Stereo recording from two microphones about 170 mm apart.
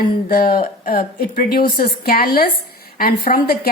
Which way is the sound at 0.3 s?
55° left (ahead or behind).